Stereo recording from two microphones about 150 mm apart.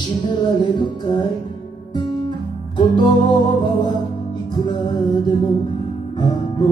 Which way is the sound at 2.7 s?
30° left (ahead or behind).